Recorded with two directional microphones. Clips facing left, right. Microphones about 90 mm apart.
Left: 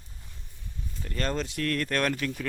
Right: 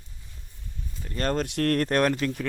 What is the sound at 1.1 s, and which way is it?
Speech, 45° right (ahead or behind).